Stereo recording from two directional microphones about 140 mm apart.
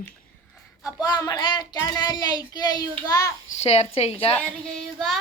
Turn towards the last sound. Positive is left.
turn(degrees=0)  # may be behind; listen again after turning